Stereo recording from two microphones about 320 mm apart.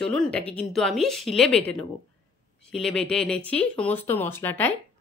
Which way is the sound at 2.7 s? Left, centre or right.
Centre.